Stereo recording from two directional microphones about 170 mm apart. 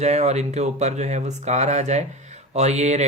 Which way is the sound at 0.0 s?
40° right (ahead or behind).